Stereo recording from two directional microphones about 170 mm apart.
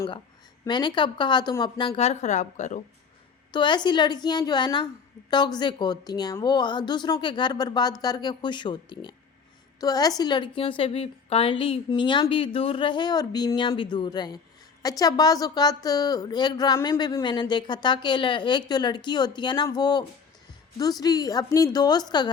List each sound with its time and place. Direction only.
0.6 s a woman's voice: 25° left (ahead or behind); by 2.8 s 45° left (ahead or behind)
3.5 s a woman's voice: 25° left (ahead or behind)